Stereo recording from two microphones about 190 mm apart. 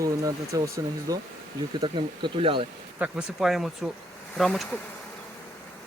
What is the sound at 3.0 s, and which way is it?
Speech, 5° right (ahead or behind).